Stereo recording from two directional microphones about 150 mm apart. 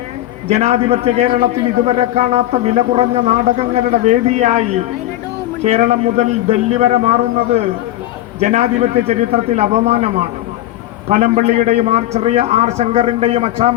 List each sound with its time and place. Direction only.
0.4 s speech: 45° right (ahead or behind)
5.6 s speech: 50° right (ahead or behind)
8.4 s speech: 45° right (ahead or behind)